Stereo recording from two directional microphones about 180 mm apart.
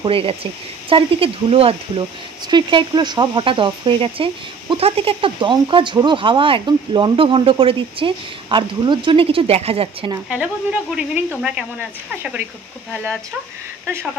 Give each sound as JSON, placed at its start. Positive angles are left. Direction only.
{"t": 0.0, "sound": "speech", "side_deg": -30}
{"t": 10.3, "sound": "speech", "side_deg": -5}
{"t": 12.9, "sound": "speech", "side_deg": -10}